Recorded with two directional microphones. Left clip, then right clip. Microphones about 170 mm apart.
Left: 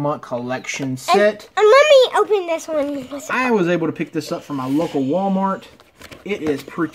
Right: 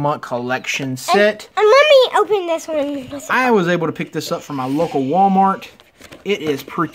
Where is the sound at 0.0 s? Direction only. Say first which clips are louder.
Right 3 dB; 20° right (ahead or behind).